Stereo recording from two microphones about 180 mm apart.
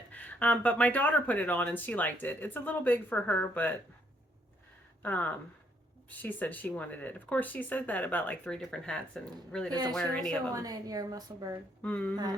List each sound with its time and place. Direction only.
0.1 s speech: 10° left (ahead or behind)
5.0 s speech: 10° left (ahead or behind)
10.5 s a woman's voice: 20° right (ahead or behind)
11.8 s speech: 10° left (ahead or behind)
12.1 s a woman's voice: 25° right (ahead or behind)